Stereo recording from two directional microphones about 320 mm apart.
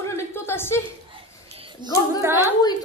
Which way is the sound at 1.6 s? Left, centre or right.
Centre.